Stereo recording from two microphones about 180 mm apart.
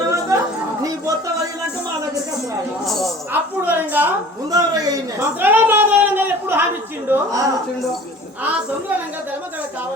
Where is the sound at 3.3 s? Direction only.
10° right (ahead or behind).